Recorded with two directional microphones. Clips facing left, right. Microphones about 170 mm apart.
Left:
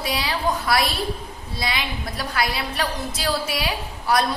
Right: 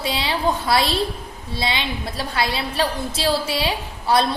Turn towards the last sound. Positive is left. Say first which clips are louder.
# right 2 dB
turn(degrees=-25)  # may be behind; listen again after turning